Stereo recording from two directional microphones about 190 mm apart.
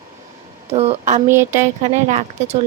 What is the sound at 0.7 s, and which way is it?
Speech, 35° right (ahead or behind).